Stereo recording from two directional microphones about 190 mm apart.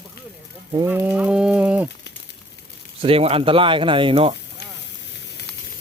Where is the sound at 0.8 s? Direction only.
10° right (ahead or behind).